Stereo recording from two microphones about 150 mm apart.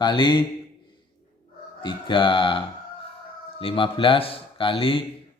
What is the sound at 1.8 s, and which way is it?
A man's voice, 35° left (ahead or behind).